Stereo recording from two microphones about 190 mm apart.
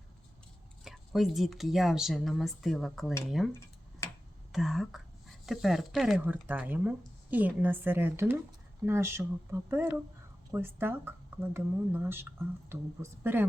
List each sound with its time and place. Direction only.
0.9 s speech: centre (ahead or behind)
4.0 s tick-tock: 15° left (ahead or behind)
4.5 s speech: centre (ahead or behind)